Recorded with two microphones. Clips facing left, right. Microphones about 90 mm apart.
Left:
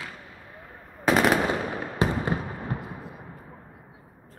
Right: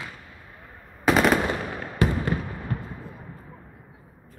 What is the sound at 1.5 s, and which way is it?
Fireworks, 20° left (ahead or behind).